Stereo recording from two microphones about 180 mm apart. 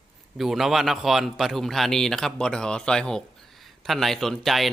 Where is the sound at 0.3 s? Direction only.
Centre (ahead or behind).